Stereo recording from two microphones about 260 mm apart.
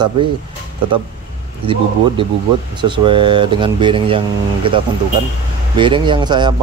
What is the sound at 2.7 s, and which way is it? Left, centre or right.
Speech, centre.